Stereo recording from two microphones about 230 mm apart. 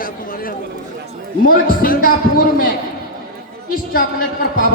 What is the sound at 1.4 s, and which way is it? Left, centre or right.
A man's voice, left.